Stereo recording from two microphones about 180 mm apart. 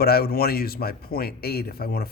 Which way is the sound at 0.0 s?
60° left (ahead or behind).